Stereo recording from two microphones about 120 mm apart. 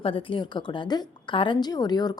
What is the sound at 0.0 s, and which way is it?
A woman's voice, 50° left (ahead or behind).